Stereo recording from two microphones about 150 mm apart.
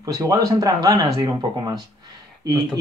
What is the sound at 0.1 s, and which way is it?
Speech, 25° right (ahead or behind).